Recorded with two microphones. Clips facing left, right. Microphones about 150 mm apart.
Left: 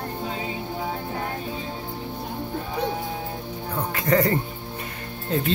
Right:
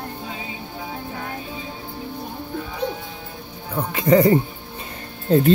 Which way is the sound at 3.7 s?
20° right (ahead or behind).